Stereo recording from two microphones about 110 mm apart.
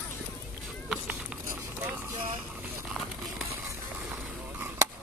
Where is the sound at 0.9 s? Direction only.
10° right (ahead or behind).